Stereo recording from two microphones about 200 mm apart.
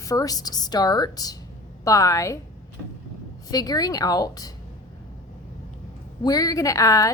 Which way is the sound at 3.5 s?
20° left (ahead or behind).